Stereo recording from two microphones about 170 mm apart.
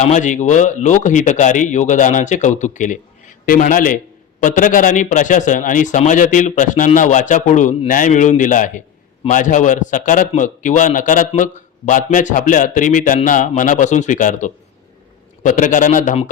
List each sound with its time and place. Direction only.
0.0 s a man's voice: 45° left (ahead or behind)